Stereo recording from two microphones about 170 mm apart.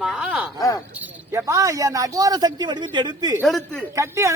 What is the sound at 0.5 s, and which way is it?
Speech, 20° left (ahead or behind).